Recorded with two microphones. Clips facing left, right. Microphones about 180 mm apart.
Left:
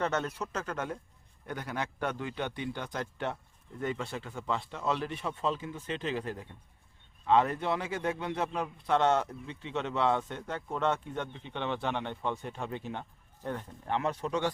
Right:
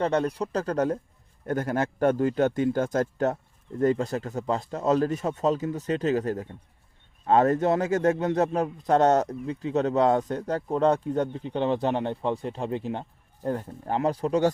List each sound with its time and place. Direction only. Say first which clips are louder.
0.0 s a man's voice: right 7 dB; 30° right (ahead or behind)